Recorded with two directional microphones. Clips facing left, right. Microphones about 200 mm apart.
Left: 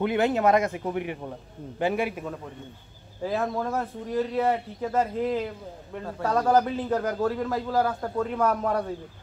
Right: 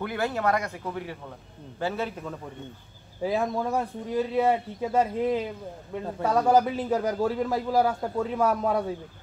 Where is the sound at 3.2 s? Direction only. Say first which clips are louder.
Right 1 dB; 10° right (ahead or behind).